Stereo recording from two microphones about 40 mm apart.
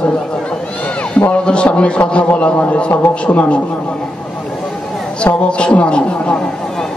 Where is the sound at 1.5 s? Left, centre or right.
Left.